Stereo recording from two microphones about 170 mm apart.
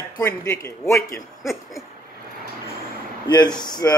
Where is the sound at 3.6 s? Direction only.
25° left (ahead or behind).